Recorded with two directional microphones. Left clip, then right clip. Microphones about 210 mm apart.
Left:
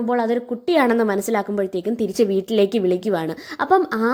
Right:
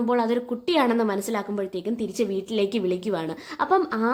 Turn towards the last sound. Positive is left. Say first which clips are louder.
# left 4 dB
turn(degrees=20)  # may be behind; listen again after turning